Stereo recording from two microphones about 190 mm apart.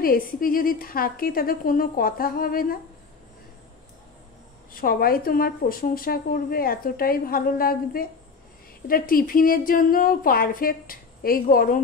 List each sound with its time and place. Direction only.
0.0 s a woman's voice: 50° left (ahead or behind)
4.7 s a woman's voice: 50° left (ahead or behind)